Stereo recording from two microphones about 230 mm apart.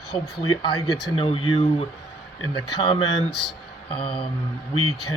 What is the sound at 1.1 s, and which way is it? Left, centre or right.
Speech, left.